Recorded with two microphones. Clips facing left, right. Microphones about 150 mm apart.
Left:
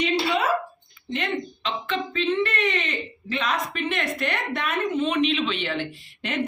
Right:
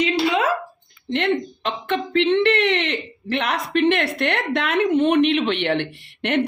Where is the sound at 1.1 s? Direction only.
65° right (ahead or behind).